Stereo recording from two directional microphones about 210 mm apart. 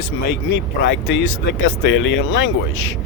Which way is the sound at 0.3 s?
60° left (ahead or behind).